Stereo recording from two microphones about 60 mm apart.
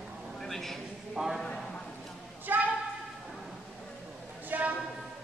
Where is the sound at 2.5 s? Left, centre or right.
Right.